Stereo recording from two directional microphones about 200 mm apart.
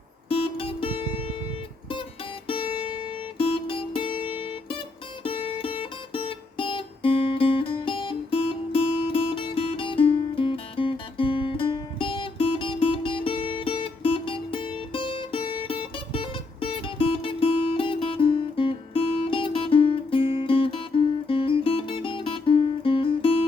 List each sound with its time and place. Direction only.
0.3 s music: 25° left (ahead or behind)
2.5 s music: 25° left (ahead or behind)